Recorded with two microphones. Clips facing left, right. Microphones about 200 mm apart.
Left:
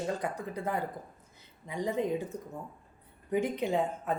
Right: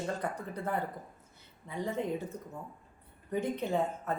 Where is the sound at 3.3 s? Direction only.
15° left (ahead or behind).